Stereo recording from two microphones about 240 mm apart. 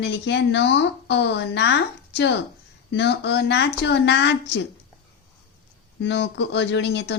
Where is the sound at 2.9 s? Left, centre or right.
Left.